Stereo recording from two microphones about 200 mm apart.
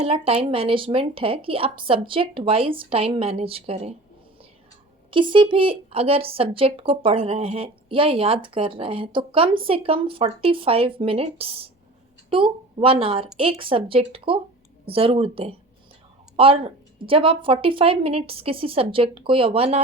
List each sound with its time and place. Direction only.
0.0 s a woman's voice: 30° right (ahead or behind)
5.1 s a woman's voice: 25° right (ahead or behind)